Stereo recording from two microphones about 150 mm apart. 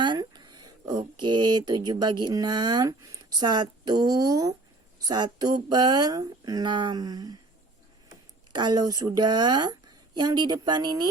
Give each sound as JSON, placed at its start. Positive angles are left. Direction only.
{"t": 0.0, "sound": "speech", "side_deg": -30}
{"t": 8.5, "sound": "speech", "side_deg": -30}